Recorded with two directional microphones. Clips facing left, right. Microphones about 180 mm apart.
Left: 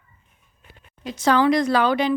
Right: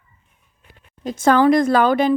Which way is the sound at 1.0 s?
50° right (ahead or behind).